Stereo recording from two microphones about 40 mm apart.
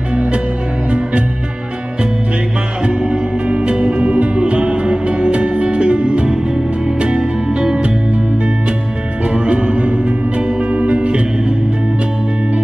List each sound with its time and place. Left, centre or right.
0.1 s music: right
2.8 s music: right
9.2 s music: right